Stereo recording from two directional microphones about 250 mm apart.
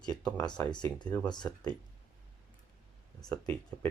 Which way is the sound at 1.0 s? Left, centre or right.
Centre.